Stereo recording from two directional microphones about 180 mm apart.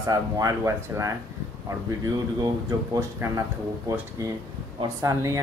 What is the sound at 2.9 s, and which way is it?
A child's voice, 15° right (ahead or behind).